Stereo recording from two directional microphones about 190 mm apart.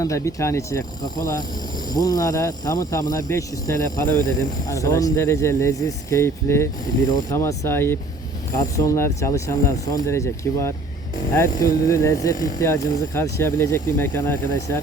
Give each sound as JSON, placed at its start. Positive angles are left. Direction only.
{"t": 0.0, "sound": "speech", "side_deg": 15}